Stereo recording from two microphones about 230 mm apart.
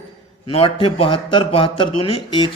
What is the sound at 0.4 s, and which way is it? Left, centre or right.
Speech, left.